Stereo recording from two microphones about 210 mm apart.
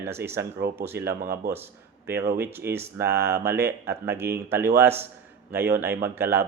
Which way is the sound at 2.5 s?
10° right (ahead or behind).